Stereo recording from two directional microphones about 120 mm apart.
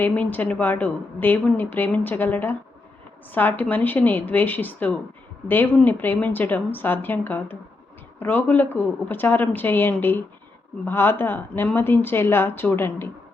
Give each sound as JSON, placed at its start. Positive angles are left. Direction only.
{"t": 0.0, "sound": "a woman's voice", "side_deg": 15}